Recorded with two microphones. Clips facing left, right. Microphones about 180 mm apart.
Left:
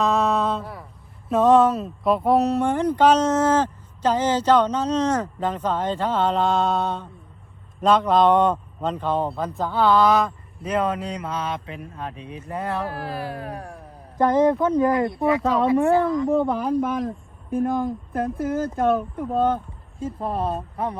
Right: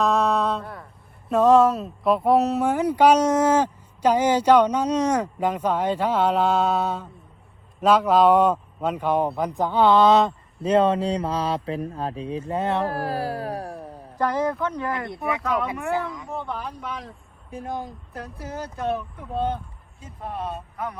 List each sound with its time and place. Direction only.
0.0 s a sound: centre (ahead or behind)
1.3 s speech: centre (ahead or behind); by 12.8 s 25° right (ahead or behind)
12.8 s music: 40° right (ahead or behind)
14.2 s speech: 20° left (ahead or behind)
15.4 s speech: 35° left (ahead or behind)